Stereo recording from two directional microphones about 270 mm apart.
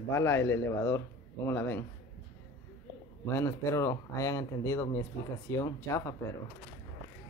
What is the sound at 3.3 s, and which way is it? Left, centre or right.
Speech, centre.